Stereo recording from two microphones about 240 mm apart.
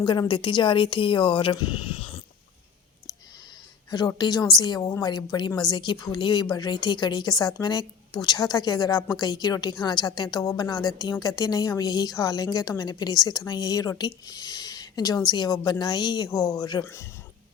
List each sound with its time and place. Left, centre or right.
0.0 s speech: centre
3.8 s a woman's voice: centre